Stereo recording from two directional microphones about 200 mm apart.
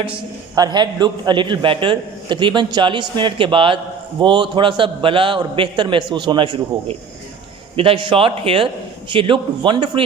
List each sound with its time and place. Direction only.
0.5 s a man's voice: 20° right (ahead or behind)